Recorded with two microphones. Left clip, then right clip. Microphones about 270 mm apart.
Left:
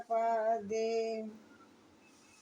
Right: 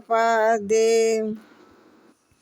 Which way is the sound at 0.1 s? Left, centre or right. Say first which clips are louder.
Right 12 dB; right.